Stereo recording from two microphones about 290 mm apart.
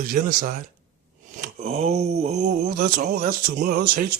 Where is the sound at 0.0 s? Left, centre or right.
Right.